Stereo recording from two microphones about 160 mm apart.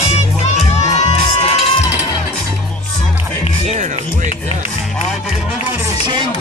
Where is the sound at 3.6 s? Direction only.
45° right (ahead or behind).